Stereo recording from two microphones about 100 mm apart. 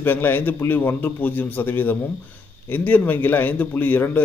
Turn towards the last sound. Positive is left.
turn(degrees=20)  # may be behind; listen again after turning